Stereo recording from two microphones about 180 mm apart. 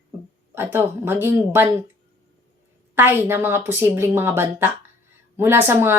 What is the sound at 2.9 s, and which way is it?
A woman's voice, 10° right (ahead or behind).